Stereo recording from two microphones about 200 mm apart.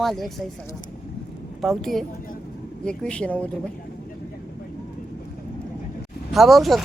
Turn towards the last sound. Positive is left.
turn(degrees=0)  # may be behind; listen again after turning